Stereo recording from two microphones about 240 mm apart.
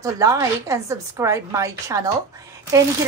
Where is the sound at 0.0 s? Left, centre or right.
Centre.